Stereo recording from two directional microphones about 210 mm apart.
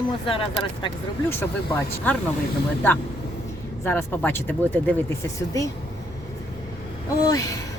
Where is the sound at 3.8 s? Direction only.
10° left (ahead or behind).